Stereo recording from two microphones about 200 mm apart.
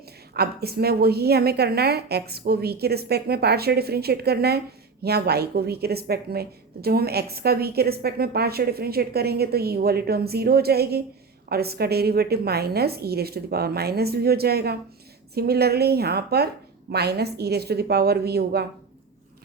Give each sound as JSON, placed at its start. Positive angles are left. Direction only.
{"t": 0.3, "sound": "speech", "side_deg": -50}